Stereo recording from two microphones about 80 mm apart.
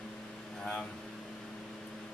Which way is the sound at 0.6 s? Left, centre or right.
Centre.